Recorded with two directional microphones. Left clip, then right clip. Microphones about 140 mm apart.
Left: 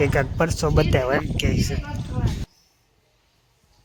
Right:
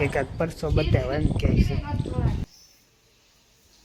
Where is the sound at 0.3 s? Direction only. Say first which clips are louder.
Left 5 dB; 50° left (ahead or behind).